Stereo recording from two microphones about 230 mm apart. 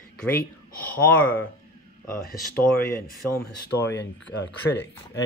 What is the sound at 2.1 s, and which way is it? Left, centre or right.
Speech, left.